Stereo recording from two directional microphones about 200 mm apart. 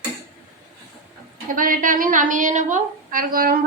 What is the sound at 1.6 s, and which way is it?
A woman's voice, 45° right (ahead or behind).